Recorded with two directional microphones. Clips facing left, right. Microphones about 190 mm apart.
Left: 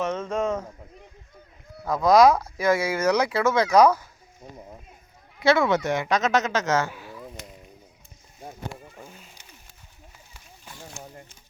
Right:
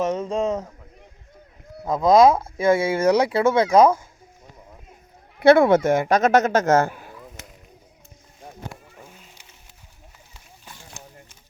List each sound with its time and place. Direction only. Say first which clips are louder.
0.3 s a man's voice: right 2 dB; 35° right (ahead or behind)
1.8 s speech: right 2 dB; 25° right (ahead or behind)
5.4 s speech: right 7 dB; 55° right (ahead or behind)
8.7 s goose: left 2 dB; centre (ahead or behind)